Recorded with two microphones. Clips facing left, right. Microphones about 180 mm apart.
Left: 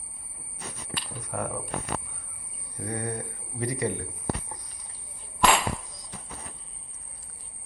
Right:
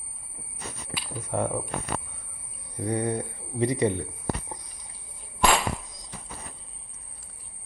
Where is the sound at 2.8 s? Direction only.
20° right (ahead or behind).